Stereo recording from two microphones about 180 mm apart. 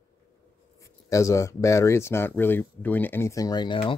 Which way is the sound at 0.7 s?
15° left (ahead or behind).